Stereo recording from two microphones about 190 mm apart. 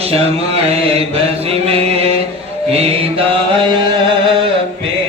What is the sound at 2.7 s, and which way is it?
Music, 30° right (ahead or behind).